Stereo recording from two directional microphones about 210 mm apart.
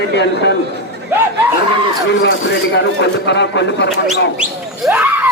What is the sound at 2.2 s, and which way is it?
Speech, 60° left (ahead or behind).